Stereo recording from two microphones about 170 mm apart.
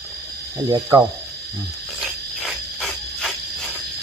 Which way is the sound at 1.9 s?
Centre (ahead or behind).